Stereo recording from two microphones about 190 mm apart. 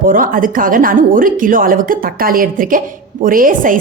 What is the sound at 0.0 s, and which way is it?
A woman's voice, 45° right (ahead or behind).